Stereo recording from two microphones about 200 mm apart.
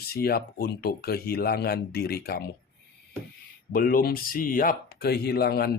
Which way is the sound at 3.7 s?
45° left (ahead or behind).